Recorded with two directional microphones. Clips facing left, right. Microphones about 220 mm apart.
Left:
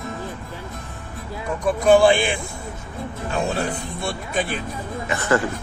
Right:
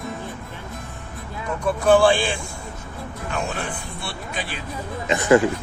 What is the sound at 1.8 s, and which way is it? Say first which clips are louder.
Speech: left 2 dB; 20° left (ahead or behind).